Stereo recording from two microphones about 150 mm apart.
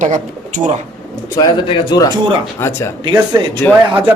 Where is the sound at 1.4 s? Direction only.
30° left (ahead or behind).